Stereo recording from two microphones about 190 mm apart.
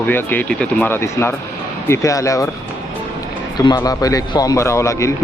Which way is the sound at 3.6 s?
20° left (ahead or behind).